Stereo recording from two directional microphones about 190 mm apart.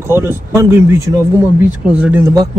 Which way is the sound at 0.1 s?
15° right (ahead or behind).